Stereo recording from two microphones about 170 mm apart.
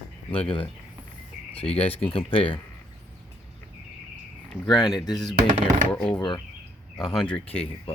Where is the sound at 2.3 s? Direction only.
30° left (ahead or behind).